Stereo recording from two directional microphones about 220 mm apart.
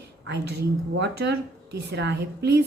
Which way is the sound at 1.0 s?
50° right (ahead or behind).